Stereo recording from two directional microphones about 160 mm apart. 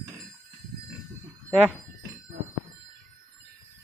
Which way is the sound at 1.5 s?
Centre (ahead or behind).